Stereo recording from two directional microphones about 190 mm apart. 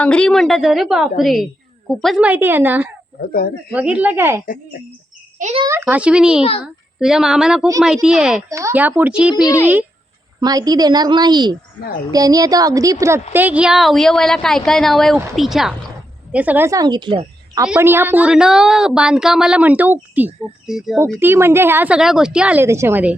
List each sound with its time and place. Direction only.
0.0 s speech: 5° left (ahead or behind); by 2.9 s 10° right (ahead or behind)
3.2 s speech: 50° left (ahead or behind)
3.7 s speech: 5° right (ahead or behind)
4.4 s speech: 45° left (ahead or behind)
5.4 s a child's voice: 45° right (ahead or behind)
5.8 s speech: 5° right (ahead or behind)
8.4 s speech: 15° right (ahead or behind)
10.4 s a woman's voice: 20° right (ahead or behind)
17.7 s speech: 10° right (ahead or behind)
21.0 s speech: 10° right (ahead or behind)